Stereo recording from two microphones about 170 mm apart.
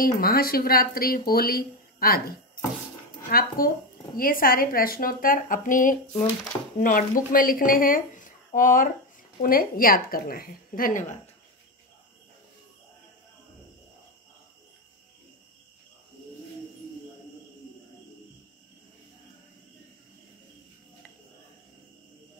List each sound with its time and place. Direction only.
0.0 s speech: 60° left (ahead or behind)